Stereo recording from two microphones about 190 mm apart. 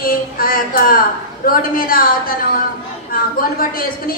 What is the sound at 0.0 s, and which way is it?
Speech, 50° left (ahead or behind).